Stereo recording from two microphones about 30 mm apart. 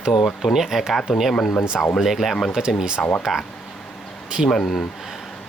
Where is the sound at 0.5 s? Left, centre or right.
Centre.